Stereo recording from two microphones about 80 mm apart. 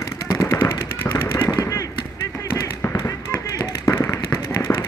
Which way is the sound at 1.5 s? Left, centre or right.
Left.